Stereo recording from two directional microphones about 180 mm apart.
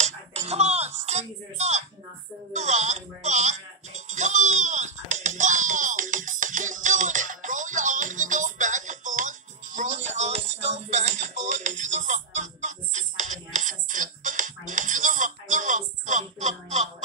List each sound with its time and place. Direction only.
0.0 s music: 35° right (ahead or behind)